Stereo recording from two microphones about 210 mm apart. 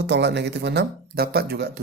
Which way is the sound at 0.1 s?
55° right (ahead or behind).